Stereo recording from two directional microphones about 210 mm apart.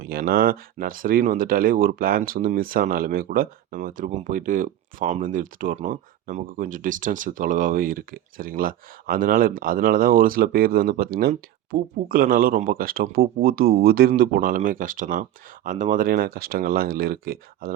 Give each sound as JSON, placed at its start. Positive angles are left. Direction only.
{"t": 0.0, "sound": "speech", "side_deg": -45}